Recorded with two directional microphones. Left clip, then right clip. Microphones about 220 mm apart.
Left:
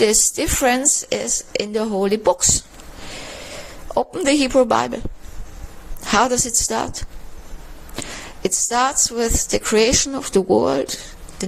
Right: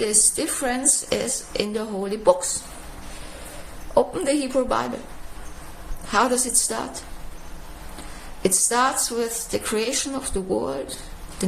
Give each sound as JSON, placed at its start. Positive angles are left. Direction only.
{"t": 0.0, "sound": "a woman's voice", "side_deg": 40}
{"t": 3.9, "sound": "a woman's voice", "side_deg": 40}
{"t": 6.1, "sound": "a woman's voice", "side_deg": 40}
{"t": 8.4, "sound": "a woman's voice", "side_deg": 40}